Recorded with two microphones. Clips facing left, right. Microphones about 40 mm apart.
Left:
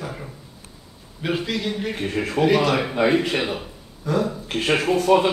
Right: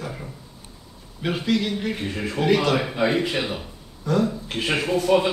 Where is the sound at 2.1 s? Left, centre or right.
Left.